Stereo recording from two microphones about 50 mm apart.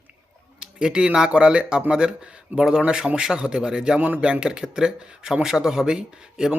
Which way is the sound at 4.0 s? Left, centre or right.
Right.